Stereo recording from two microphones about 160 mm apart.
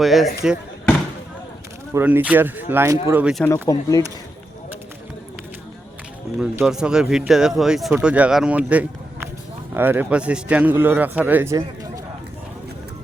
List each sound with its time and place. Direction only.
0.0 s speech: centre (ahead or behind)
1.9 s a man's voice: 15° right (ahead or behind)
3.4 s speech: 20° left (ahead or behind)
6.4 s a man's voice: 5° right (ahead or behind)